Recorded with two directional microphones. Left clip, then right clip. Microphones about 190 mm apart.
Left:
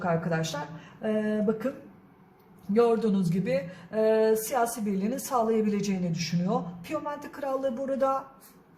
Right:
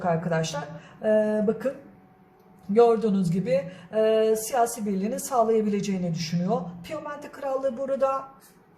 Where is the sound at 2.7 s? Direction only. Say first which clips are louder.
Right 4 dB; 10° right (ahead or behind).